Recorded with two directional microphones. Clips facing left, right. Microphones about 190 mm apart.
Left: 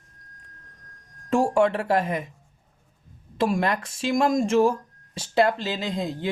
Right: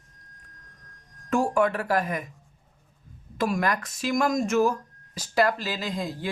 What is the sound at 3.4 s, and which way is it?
Speech, 30° left (ahead or behind).